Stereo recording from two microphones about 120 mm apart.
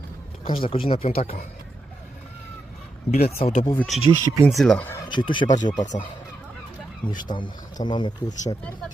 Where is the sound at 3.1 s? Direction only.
60° left (ahead or behind).